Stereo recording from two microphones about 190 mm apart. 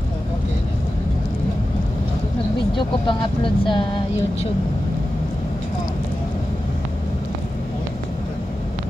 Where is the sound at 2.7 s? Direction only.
25° left (ahead or behind).